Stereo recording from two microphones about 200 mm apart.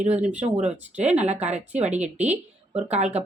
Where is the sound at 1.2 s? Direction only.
35° right (ahead or behind).